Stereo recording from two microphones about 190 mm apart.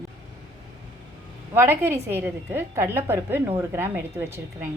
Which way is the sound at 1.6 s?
10° right (ahead or behind).